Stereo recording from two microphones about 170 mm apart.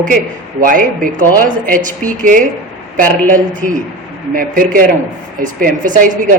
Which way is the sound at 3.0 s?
10° left (ahead or behind).